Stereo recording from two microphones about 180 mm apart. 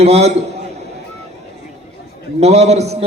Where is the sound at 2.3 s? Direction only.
35° right (ahead or behind).